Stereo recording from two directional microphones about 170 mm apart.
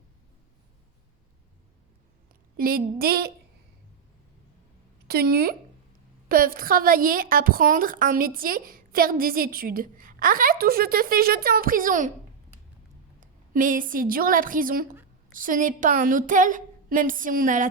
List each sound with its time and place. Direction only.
2.6 s a woman's voice: 60° right (ahead or behind)
5.0 s a woman's voice: 65° right (ahead or behind)